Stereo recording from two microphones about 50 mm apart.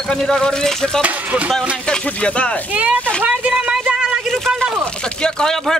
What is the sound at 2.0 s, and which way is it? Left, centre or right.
Speech, left.